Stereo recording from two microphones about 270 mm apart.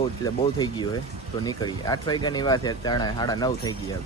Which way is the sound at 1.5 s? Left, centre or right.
Centre.